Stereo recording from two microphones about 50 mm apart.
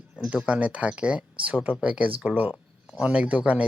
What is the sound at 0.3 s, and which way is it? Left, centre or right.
A man's voice, right.